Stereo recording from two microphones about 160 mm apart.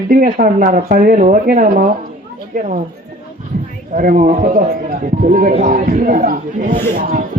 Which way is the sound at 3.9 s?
55° right (ahead or behind).